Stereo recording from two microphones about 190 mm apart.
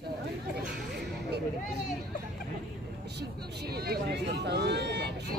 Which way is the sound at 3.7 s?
55° right (ahead or behind).